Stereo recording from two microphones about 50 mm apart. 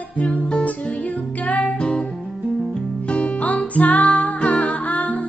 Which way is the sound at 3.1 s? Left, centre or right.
Left.